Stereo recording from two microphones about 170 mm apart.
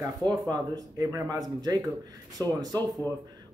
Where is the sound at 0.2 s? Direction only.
25° right (ahead or behind).